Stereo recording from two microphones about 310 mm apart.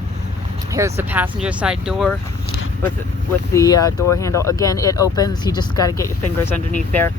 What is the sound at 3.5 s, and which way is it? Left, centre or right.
Speech, centre.